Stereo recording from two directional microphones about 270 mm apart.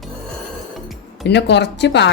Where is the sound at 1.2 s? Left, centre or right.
Left.